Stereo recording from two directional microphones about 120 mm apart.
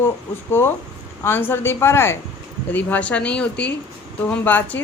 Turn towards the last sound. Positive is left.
turn(degrees=15)  # may be behind; listen again after turning